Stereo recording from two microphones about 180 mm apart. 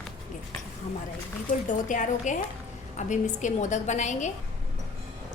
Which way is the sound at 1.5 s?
45° left (ahead or behind).